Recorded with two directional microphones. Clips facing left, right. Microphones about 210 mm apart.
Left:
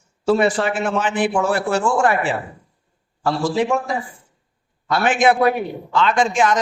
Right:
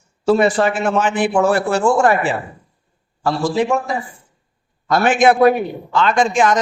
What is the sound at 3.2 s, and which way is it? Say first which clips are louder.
Speech: right 2 dB; 40° right (ahead or behind).